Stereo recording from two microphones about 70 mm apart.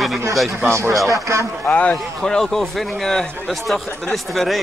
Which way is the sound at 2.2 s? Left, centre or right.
Centre.